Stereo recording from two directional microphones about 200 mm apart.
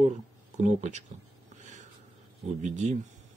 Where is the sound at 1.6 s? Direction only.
35° right (ahead or behind).